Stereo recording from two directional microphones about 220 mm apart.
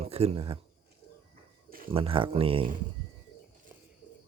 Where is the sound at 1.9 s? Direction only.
25° right (ahead or behind).